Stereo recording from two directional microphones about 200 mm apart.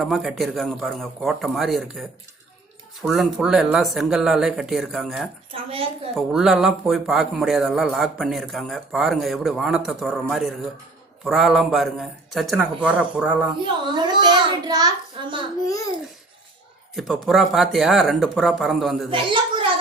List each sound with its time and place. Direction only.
0.0 s speech: centre (ahead or behind)
5.5 s a child's voice: 30° right (ahead or behind)
6.1 s speech: centre (ahead or behind)
13.8 s a child's voice: 20° right (ahead or behind)
15.6 s a child's voice: 15° left (ahead or behind)
16.9 s speech: centre (ahead or behind)